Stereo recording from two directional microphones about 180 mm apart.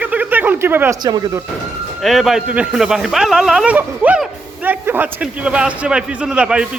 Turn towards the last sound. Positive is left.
turn(degrees=-5)  # may be behind; listen again after turning